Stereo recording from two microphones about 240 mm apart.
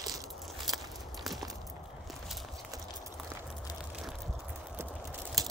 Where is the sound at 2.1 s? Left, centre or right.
Centre.